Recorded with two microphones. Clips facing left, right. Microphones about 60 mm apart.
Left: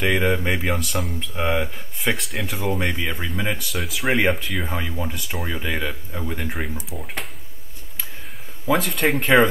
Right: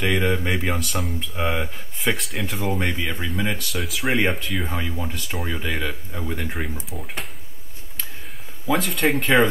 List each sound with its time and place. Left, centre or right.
0.0 s speech: centre
8.6 s speech: centre